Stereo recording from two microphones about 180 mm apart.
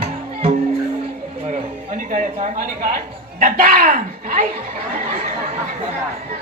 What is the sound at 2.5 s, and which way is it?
A man's voice, 50° right (ahead or behind).